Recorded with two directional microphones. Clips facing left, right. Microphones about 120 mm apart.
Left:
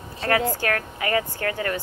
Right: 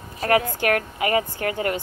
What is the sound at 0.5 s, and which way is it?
A woman's voice, 20° right (ahead or behind).